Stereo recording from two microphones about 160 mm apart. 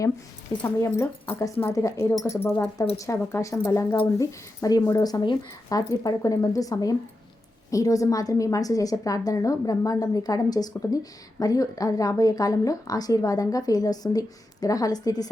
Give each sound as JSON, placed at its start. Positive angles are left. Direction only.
{"t": 0.6, "sound": "a woman's voice", "side_deg": 15}